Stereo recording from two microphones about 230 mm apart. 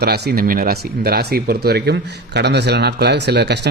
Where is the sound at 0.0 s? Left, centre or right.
Right.